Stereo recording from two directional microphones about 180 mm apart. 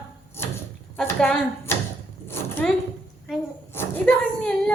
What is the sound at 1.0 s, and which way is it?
A woman's voice, 10° left (ahead or behind).